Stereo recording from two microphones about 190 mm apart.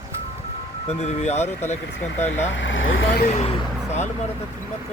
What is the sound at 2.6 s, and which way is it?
Speech, 80° left.